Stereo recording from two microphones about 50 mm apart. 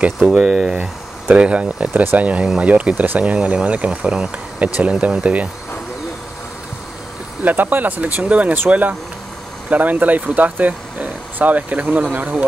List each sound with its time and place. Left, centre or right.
0.3 s speech: centre
7.4 s speech: right